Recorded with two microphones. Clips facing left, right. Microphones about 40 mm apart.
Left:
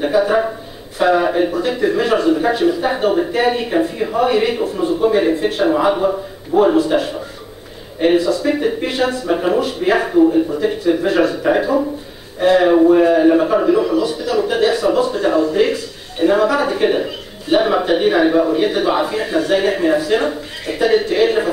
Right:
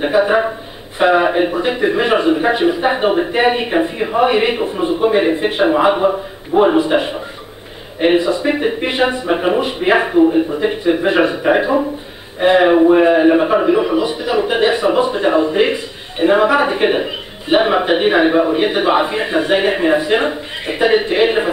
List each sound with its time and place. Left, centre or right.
0.0 s a man's voice: right